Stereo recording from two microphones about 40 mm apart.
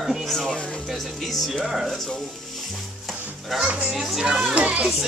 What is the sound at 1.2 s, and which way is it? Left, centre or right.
Speech, centre.